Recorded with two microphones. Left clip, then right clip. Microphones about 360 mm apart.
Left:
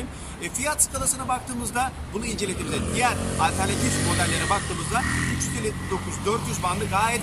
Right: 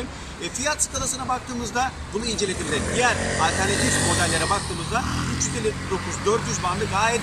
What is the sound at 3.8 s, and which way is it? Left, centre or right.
Speech, right.